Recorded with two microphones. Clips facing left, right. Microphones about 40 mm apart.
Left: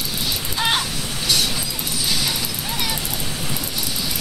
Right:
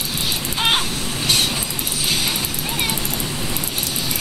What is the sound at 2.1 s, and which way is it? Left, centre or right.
Music, right.